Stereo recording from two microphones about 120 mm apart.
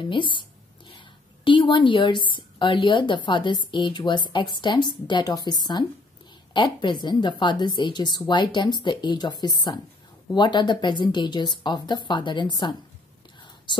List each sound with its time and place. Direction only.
0.0 s a woman's voice: 40° left (ahead or behind)